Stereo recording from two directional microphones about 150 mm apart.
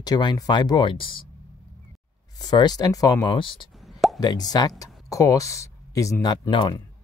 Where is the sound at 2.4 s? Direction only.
25° left (ahead or behind).